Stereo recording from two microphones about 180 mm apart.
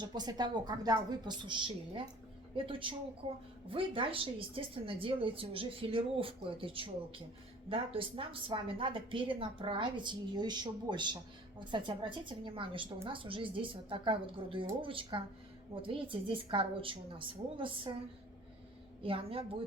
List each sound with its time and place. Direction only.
0.0 s a woman's voice: 25° right (ahead or behind)
19.0 s a woman's voice: 30° right (ahead or behind)